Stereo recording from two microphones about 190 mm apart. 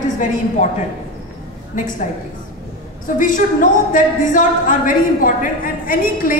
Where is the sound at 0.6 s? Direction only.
40° left (ahead or behind).